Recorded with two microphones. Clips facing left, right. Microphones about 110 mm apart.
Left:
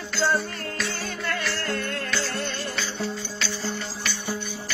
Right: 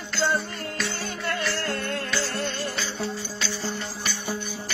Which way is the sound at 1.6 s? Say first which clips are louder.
Even; 35° right (ahead or behind).